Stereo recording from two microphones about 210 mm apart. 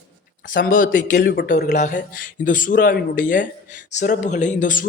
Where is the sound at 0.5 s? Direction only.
40° left (ahead or behind).